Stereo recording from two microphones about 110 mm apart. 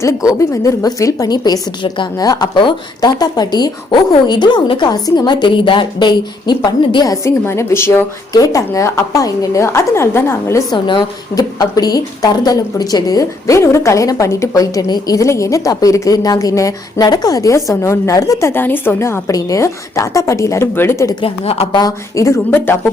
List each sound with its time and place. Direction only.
0.0 s a woman's voice: 30° left (ahead or behind)
8.3 s a woman's voice: 35° left (ahead or behind)
10.7 s a woman's voice: 40° left (ahead or behind); by 21.2 s 25° left (ahead or behind)
21.2 s a woman's voice: 60° left (ahead or behind)
21.7 s a woman's voice: 35° left (ahead or behind)
22.5 s a woman's voice: 20° left (ahead or behind)